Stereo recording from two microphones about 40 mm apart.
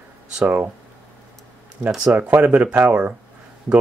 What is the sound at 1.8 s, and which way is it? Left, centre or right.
Speech, right.